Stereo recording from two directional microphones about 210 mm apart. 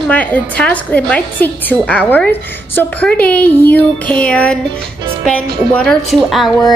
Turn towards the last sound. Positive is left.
turn(degrees=0)  # may be behind; listen again after turning